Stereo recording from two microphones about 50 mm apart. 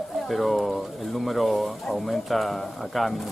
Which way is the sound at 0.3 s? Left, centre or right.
Centre.